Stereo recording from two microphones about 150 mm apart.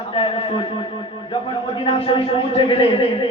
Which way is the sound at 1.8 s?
40° left (ahead or behind).